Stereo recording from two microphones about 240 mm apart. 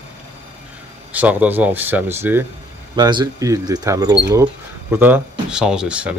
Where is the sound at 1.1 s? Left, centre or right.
Centre.